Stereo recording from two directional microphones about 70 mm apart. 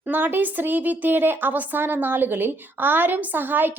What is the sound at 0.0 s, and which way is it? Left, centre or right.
A woman's voice, right.